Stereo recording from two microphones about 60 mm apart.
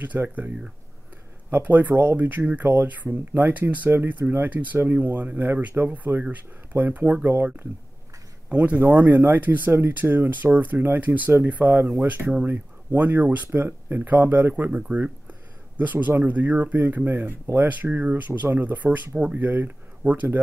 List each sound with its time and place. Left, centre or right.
0.0 s speech: right
2.7 s speech: right
3.1 s speech: right
8.5 s speech: right